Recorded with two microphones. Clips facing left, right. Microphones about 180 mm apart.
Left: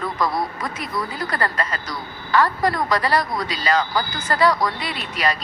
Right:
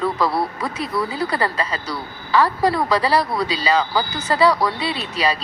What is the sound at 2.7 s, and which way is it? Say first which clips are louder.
Speech: right 2 dB; 10° right (ahead or behind).